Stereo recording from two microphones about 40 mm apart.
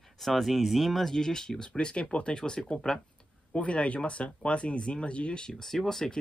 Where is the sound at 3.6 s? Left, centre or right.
Left.